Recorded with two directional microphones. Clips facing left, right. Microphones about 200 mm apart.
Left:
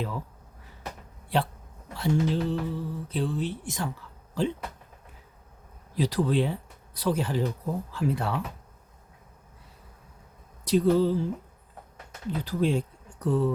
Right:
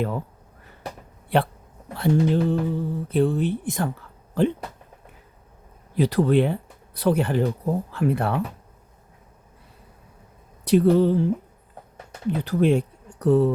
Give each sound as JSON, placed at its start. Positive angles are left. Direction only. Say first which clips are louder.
{"t": 1.3, "sound": "speech", "louder": "right 5 dB", "side_deg": -60}
{"t": 6.0, "sound": "speech", "louder": "right 6 dB", "side_deg": -60}
{"t": 10.7, "sound": "speech", "louder": "right 5 dB", "side_deg": -60}
{"t": 12.5, "sound": "speech", "louder": "right 6 dB", "side_deg": -65}